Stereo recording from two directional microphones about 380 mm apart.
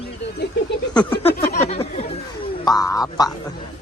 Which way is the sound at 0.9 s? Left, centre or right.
Centre.